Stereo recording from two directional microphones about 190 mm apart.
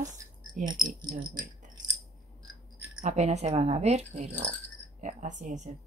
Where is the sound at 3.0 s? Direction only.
40° right (ahead or behind).